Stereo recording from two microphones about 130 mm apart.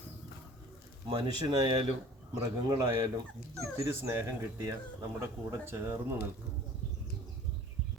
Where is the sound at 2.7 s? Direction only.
25° right (ahead or behind).